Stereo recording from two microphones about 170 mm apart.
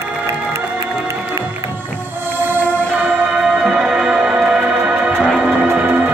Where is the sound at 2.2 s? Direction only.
10° right (ahead or behind).